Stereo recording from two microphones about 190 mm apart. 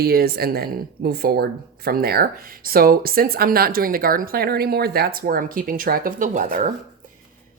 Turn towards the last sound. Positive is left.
turn(degrees=-45)  # may be behind; listen again after turning